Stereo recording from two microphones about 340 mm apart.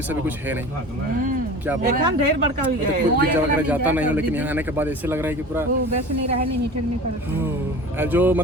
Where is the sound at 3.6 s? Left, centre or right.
Centre.